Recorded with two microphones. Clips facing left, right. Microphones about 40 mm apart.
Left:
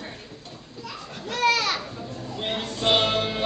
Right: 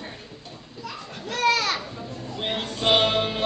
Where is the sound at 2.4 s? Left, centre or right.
Centre.